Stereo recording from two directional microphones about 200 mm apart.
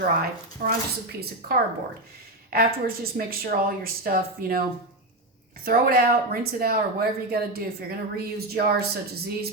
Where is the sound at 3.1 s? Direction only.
45° right (ahead or behind).